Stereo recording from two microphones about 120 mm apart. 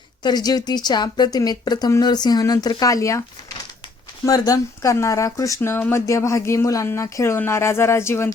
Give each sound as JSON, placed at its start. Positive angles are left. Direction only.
{"t": 0.2, "sound": "speech", "side_deg": 35}
{"t": 4.3, "sound": "speech", "side_deg": 30}